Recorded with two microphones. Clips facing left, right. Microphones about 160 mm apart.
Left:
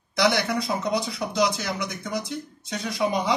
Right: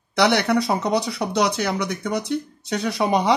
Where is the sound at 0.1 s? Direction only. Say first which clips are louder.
Right 4 dB; 70° right (ahead or behind).